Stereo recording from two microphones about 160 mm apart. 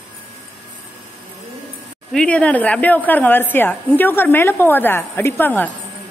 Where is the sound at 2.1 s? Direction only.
5° left (ahead or behind).